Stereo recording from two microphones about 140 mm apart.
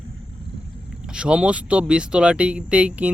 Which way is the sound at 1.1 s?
5° right (ahead or behind).